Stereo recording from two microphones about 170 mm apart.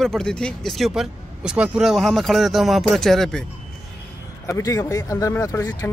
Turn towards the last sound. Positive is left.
turn(degrees=15)  # may be behind; listen again after turning